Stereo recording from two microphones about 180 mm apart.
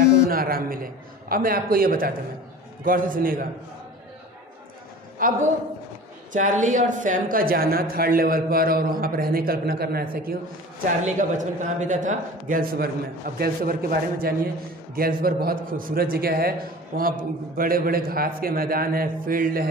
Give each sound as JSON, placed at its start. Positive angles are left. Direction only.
{"t": 0.3, "sound": "a man's voice", "side_deg": -55}
{"t": 5.2, "sound": "a man's voice", "side_deg": -50}
{"t": 11.1, "sound": "a man's voice", "side_deg": -45}